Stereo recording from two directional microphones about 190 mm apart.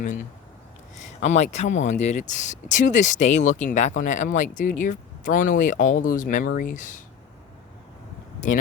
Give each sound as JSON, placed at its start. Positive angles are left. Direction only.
{"t": 1.0, "sound": "speech", "side_deg": 40}
{"t": 8.4, "sound": "speech", "side_deg": 40}